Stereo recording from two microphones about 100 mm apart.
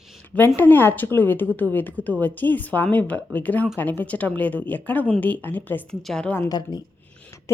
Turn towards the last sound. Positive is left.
turn(degrees=40)  # may be behind; listen again after turning